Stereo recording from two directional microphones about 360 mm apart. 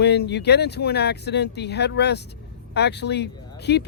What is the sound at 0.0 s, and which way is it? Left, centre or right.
Speech, left.